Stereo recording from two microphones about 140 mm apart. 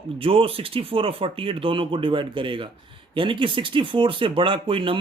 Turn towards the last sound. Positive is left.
turn(degrees=-40)  # may be behind; listen again after turning